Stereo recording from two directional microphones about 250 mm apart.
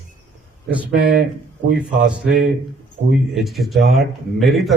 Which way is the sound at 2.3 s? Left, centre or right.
Right.